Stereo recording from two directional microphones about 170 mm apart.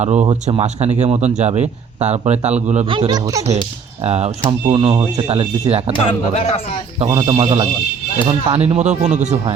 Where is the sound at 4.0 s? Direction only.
35° right (ahead or behind).